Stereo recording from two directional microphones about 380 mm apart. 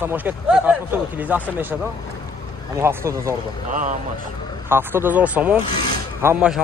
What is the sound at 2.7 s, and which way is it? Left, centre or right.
Speech, centre.